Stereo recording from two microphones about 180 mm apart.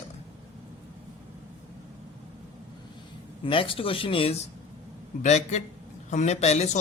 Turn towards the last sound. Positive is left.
turn(degrees=40)  # may be behind; listen again after turning